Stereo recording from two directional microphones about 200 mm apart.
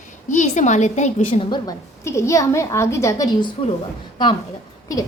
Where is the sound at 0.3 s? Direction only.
35° left (ahead or behind).